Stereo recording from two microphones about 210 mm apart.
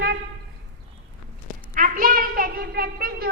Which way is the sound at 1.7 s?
40° right (ahead or behind).